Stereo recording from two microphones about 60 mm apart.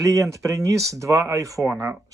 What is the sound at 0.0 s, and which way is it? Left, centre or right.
Speech, right.